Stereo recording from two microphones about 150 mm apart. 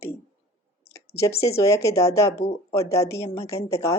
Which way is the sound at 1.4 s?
20° left (ahead or behind).